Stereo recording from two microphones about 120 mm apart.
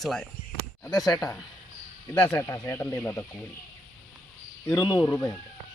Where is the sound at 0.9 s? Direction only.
30° left (ahead or behind).